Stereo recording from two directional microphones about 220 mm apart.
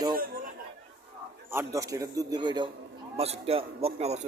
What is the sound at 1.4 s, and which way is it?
A man's voice, 10° right (ahead or behind).